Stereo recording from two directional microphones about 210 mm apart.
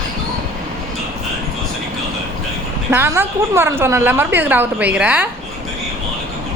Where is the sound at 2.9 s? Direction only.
10° right (ahead or behind).